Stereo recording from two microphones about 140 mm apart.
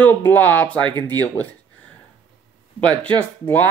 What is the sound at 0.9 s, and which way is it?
Speech, 30° right (ahead or behind).